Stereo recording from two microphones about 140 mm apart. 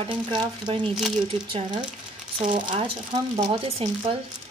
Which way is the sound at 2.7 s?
35° right (ahead or behind).